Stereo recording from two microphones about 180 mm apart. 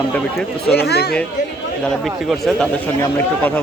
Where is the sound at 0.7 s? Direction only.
65° left (ahead or behind).